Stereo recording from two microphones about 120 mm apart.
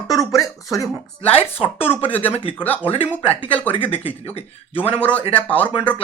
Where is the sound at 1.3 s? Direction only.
55° left (ahead or behind).